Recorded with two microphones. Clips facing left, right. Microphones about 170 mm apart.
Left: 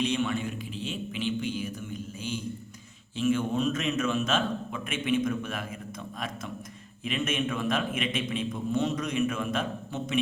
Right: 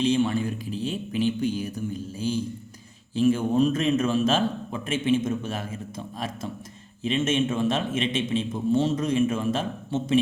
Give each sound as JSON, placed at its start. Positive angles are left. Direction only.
{"t": 0.0, "sound": "a man's voice", "side_deg": -30}